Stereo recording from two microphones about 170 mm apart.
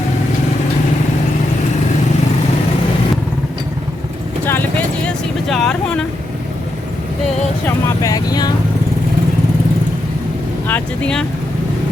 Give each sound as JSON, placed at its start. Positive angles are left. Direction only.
{"t": 5.0, "sound": "vehicle", "side_deg": 5}
{"t": 7.9, "sound": "speech", "side_deg": 20}
{"t": 10.7, "sound": "speech", "side_deg": 10}